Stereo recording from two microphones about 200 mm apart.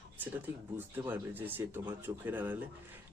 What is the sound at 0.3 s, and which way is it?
A man's voice, 10° right (ahead or behind).